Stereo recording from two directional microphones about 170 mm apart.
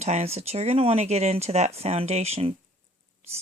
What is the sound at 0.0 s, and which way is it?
Speech, 40° right (ahead or behind).